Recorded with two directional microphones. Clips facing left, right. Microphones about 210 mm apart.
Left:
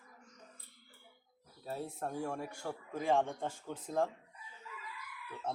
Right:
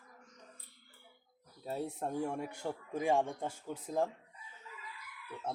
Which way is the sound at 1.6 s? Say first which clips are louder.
Right 2 dB; 20° right (ahead or behind).